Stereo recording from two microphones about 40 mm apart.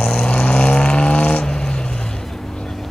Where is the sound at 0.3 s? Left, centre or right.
Left.